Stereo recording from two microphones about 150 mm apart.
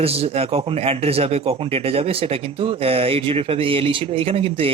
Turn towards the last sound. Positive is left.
turn(degrees=-40)  # may be behind; listen again after turning